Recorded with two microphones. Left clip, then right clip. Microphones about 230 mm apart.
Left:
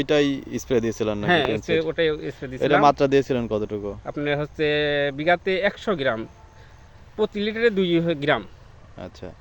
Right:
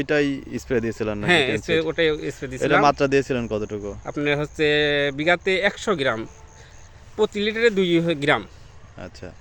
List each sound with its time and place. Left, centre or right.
0.0 s speech: centre
1.3 s speech: centre
2.8 s speech: centre
4.0 s speech: centre
9.0 s speech: centre